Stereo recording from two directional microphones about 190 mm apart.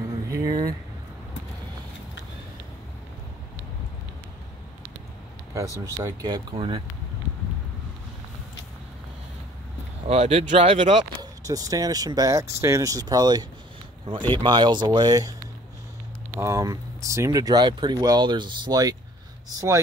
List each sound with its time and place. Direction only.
0.3 s vehicle: 20° right (ahead or behind)
6.0 s speech: 20° right (ahead or behind)
10.0 s speech: 30° right (ahead or behind)
11.4 s speech: 20° right (ahead or behind)
16.3 s speech: 15° right (ahead or behind)